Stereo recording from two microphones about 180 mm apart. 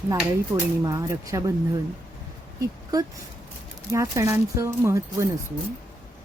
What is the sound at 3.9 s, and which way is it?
Speech, 20° right (ahead or behind).